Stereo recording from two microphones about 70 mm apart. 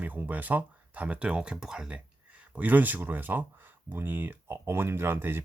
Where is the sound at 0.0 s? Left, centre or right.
Right.